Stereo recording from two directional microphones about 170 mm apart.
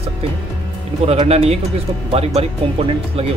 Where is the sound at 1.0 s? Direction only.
35° right (ahead or behind).